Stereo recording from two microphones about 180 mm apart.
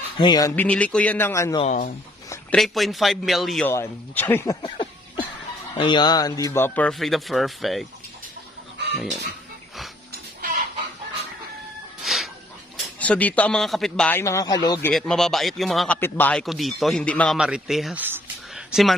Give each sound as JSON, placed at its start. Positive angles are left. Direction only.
{"t": 0.2, "sound": "speech", "side_deg": 20}
{"t": 1.6, "sound": "speech", "side_deg": 40}
{"t": 2.5, "sound": "a man's voice", "side_deg": 0}
{"t": 3.6, "sound": "speech", "side_deg": 10}
{"t": 12.0, "sound": "a sound", "side_deg": 0}
{"t": 13.0, "sound": "speech", "side_deg": 10}
{"t": 14.9, "sound": "a man's voice", "side_deg": 5}
{"t": 18.0, "sound": "a sound", "side_deg": -5}